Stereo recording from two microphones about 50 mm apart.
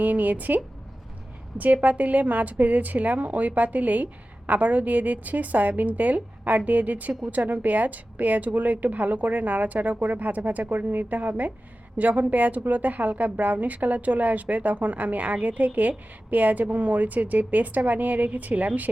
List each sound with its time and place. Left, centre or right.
0.0 s a woman's voice: right